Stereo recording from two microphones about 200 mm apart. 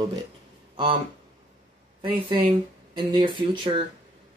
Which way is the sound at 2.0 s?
25° right (ahead or behind).